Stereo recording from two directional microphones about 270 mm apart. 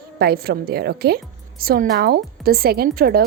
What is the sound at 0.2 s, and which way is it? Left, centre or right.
A woman's voice, right.